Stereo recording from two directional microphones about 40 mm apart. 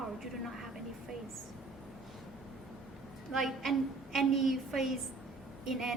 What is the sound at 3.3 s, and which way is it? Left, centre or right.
A woman's voice, centre.